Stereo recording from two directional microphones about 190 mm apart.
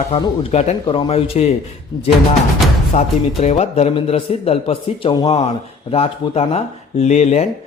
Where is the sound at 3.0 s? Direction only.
35° left (ahead or behind).